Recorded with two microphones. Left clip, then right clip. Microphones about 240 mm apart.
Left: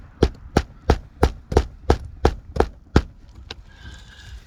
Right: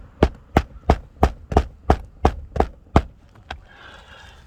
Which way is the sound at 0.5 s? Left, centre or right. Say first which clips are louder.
Right 2 dB; centre.